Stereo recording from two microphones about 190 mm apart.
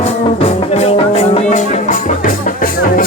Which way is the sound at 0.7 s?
35° left (ahead or behind).